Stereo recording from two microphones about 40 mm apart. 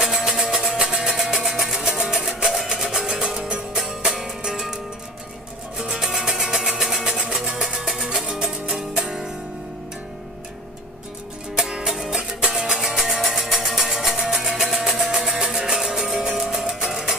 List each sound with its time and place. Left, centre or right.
0.0 s music: centre
3.7 s music: centre
5.8 s music: centre
7.1 s music: right
11.5 s music: centre